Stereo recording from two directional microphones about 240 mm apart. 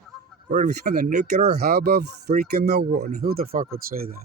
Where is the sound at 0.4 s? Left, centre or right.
Right.